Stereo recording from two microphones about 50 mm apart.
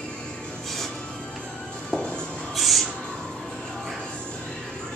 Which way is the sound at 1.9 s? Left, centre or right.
Left.